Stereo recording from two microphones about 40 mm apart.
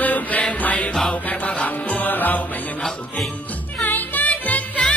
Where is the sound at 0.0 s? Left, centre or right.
Left.